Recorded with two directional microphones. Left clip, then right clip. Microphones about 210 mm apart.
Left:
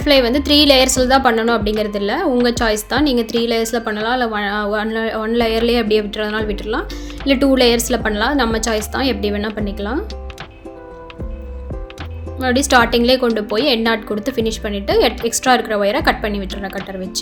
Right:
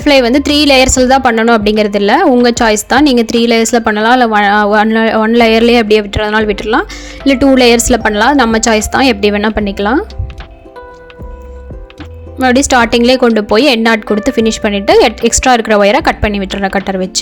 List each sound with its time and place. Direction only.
0.0 s a woman's voice: 40° right (ahead or behind)
12.4 s a woman's voice: 35° right (ahead or behind)